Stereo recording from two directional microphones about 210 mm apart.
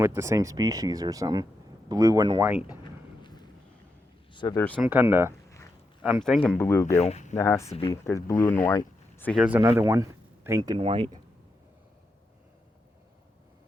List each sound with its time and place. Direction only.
0.0 s speech: 10° right (ahead or behind)
2.4 s speech: 5° right (ahead or behind)
3.2 s vehicle: 20° left (ahead or behind)
4.4 s speech: 20° left (ahead or behind)
4.6 s speech: 5° left (ahead or behind)
4.9 s speech: 10° right (ahead or behind); by 6.9 s 15° left (ahead or behind)
6.9 s speech: 30° left (ahead or behind)
7.3 s speech: 15° left (ahead or behind)
7.7 s speech: 25° left (ahead or behind)
8.0 s speech: 15° left (ahead or behind)
9.3 s speech: 5° right (ahead or behind)
9.6 s speech: 15° right (ahead or behind)